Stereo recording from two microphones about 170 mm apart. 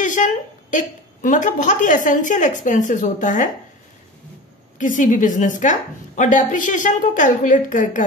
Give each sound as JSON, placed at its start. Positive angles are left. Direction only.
{"t": 0.0, "sound": "a woman's voice", "side_deg": 50}
{"t": 4.7, "sound": "a woman's voice", "side_deg": 50}